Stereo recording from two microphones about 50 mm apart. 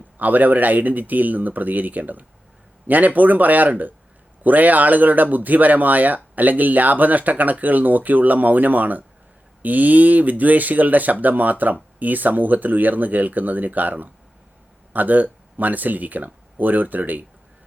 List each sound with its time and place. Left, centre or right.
0.2 s speech: right